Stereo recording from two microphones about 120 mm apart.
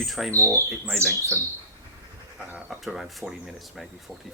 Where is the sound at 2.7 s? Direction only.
Centre (ahead or behind).